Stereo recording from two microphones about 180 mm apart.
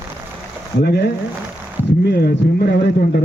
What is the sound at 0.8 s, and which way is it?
A man's voice, 70° left (ahead or behind).